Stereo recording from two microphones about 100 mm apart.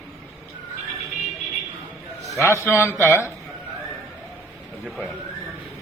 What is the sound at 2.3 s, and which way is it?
Speech, 30° left (ahead or behind).